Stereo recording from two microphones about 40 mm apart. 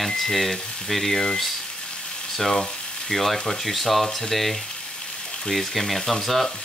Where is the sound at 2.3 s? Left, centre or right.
Centre.